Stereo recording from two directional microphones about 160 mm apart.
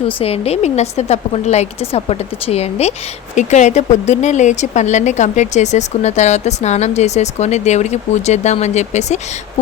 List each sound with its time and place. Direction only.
0.2 s a woman's voice: 40° left (ahead or behind)